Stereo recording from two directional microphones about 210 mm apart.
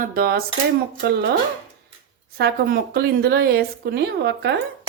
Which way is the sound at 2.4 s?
50° right (ahead or behind).